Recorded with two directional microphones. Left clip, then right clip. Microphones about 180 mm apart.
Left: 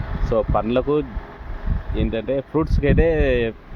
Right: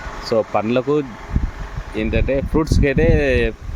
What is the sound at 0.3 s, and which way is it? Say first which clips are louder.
Speech: right 2 dB; 10° right (ahead or behind).